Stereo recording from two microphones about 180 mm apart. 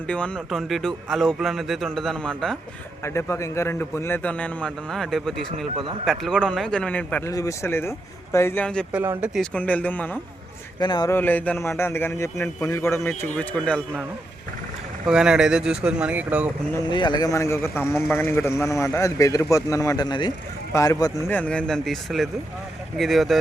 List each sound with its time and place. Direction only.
0.1 s speech: 5° left (ahead or behind)
3.0 s speech: 15° left (ahead or behind)
8.9 s speech: 10° right (ahead or behind); by 10.1 s 10° left (ahead or behind)
10.8 s a man's voice: 25° left (ahead or behind)
11.1 s speech: 10° left (ahead or behind)
15.0 s speech: 5° right (ahead or behind)
16.9 s speech: 25° left (ahead or behind); by 23.4 s centre (ahead or behind)